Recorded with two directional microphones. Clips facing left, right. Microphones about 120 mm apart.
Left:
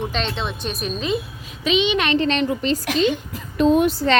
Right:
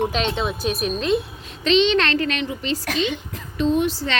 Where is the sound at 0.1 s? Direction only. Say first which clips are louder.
Right 2 dB; 5° right (ahead or behind); by 2.1 s 10° left (ahead or behind).